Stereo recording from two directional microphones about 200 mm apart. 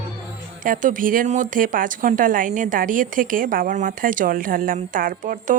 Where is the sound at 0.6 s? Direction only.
40° right (ahead or behind).